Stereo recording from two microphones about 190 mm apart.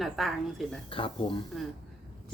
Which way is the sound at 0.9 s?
25° left (ahead or behind).